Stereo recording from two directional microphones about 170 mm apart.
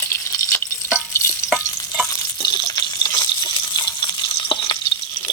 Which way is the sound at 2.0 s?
20° left (ahead or behind).